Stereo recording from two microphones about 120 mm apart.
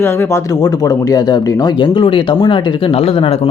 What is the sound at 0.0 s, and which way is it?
Speech, 25° left (ahead or behind).